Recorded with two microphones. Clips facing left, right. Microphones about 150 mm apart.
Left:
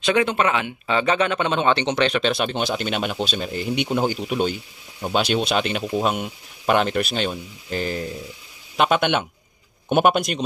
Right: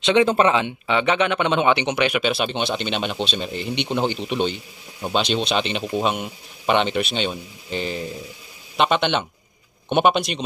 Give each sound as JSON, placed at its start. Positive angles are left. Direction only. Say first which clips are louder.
{"t": 0.0, "sound": "speech", "louder": "right 3 dB", "side_deg": -25}